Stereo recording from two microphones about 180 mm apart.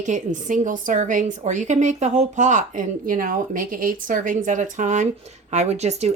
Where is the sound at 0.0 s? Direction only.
45° right (ahead or behind).